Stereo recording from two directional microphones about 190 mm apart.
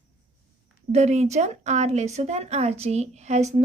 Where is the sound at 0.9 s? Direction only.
35° right (ahead or behind).